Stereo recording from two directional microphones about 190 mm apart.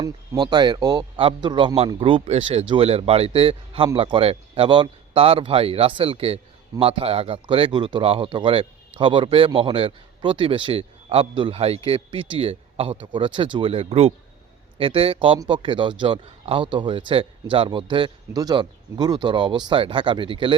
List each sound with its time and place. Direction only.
0.0 s speech: 20° right (ahead or behind)